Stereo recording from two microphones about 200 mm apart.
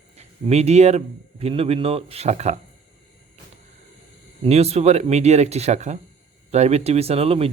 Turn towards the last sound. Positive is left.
turn(degrees=-30)  # may be behind; listen again after turning